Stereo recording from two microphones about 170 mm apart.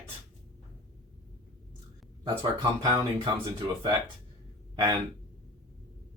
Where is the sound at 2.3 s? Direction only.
20° right (ahead or behind).